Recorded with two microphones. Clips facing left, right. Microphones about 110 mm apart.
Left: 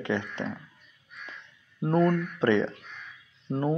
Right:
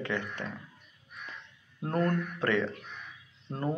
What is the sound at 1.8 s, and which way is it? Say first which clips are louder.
Speech: left 5 dB; 20° left (ahead or behind).